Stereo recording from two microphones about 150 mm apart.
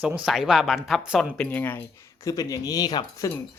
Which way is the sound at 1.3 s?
10° left (ahead or behind).